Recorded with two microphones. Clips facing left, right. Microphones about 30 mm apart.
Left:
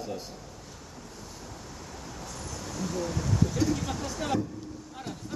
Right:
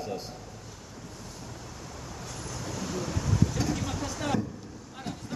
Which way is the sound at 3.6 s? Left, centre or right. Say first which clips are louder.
Left 3 dB; centre.